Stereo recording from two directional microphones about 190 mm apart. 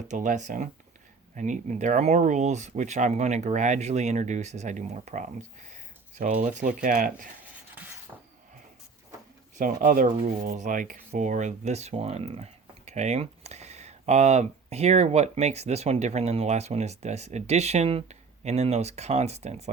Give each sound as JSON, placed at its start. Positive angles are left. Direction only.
{"t": 0.1, "sound": "speech", "side_deg": -40}
{"t": 5.7, "sound": "a sound", "side_deg": -40}
{"t": 6.4, "sound": "speech", "side_deg": -40}
{"t": 9.6, "sound": "speech", "side_deg": -45}